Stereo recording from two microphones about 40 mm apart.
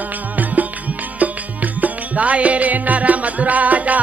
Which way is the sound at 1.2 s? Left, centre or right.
Right.